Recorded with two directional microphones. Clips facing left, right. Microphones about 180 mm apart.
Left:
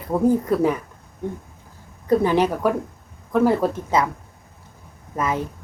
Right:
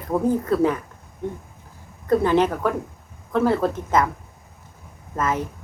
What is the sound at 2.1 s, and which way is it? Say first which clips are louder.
Speech: even; 15° left (ahead or behind).